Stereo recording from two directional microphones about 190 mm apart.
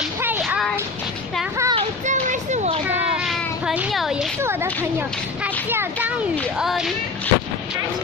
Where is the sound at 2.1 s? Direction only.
40° right (ahead or behind).